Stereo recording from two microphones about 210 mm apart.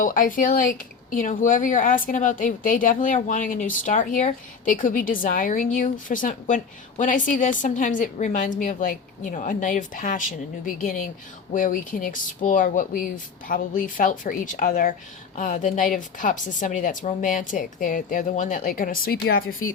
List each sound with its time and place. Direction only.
0.0 s speech: 40° left (ahead or behind)